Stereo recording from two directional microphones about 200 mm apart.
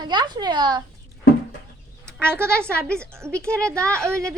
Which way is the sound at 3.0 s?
15° right (ahead or behind).